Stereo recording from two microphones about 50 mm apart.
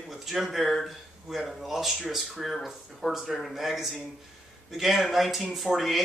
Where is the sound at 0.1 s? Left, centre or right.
Centre.